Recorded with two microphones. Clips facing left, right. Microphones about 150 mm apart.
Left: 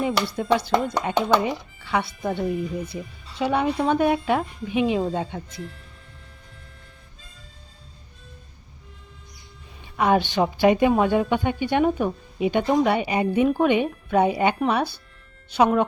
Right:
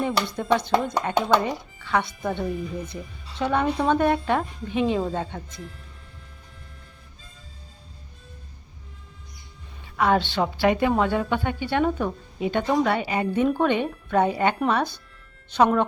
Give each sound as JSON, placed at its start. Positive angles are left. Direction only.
{"t": 0.0, "sound": "a woman's voice", "side_deg": 10}
{"t": 10.0, "sound": "a woman's voice", "side_deg": 15}